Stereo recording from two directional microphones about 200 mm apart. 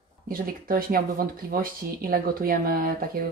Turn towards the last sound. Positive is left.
turn(degrees=-45)  # may be behind; listen again after turning